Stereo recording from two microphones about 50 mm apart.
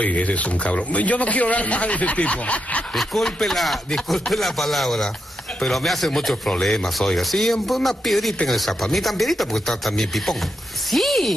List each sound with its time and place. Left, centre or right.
0.0 s speech: left
2.9 s chopping: centre